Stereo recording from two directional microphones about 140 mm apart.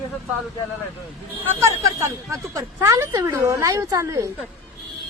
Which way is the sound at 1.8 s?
20° right (ahead or behind).